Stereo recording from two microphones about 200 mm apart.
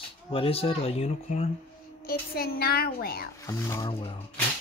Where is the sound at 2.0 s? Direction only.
50° left (ahead or behind).